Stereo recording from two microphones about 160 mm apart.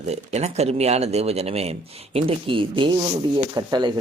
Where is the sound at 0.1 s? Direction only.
45° right (ahead or behind).